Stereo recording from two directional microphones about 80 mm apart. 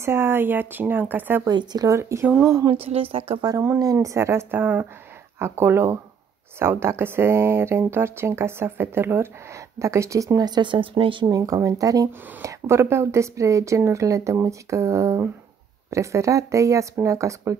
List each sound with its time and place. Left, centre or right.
0.0 s speech: right
1.5 s speech: right
1.9 s speech: right
2.4 s a woman's voice: right
11.2 s speech: right